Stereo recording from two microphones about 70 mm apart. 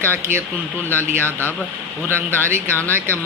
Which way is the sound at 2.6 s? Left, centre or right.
Left.